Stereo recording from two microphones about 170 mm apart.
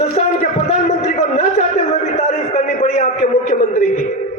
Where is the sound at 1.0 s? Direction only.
45° left (ahead or behind).